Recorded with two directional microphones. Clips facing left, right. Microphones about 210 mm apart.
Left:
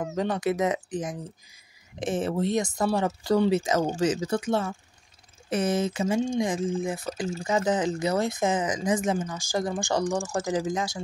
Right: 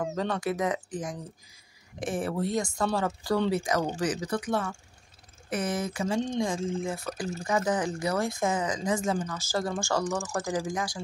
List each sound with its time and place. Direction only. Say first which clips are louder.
0.0 s speech: left 3 dB; 20° left (ahead or behind)